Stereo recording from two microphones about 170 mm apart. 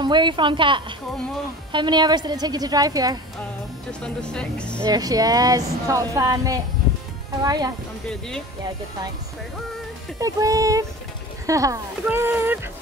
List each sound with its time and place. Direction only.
0.0 s speech: 25° right (ahead or behind)
4.0 s speech: 5° left (ahead or behind)
4.8 s speech: 20° right (ahead or behind)
10.1 s speech: 20° right (ahead or behind)